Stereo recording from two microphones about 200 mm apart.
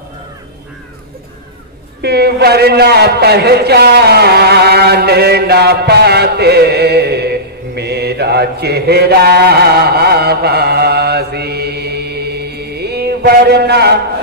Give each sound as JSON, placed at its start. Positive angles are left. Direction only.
{"t": 2.0, "sound": "a man's voice", "side_deg": -55}